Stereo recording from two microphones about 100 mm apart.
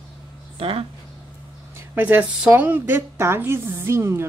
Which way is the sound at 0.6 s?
70° right (ahead or behind).